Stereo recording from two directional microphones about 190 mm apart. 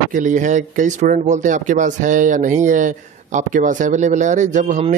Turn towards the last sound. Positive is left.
turn(degrees=-40)  # may be behind; listen again after turning